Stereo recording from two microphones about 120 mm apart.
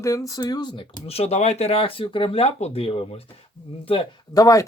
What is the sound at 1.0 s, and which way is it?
Speech, 60° left (ahead or behind).